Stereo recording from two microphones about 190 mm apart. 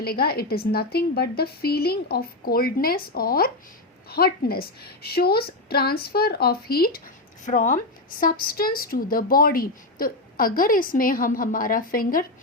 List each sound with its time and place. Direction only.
0.0 s a woman's voice: 55° left (ahead or behind)
7.4 s a woman's voice: 40° left (ahead or behind)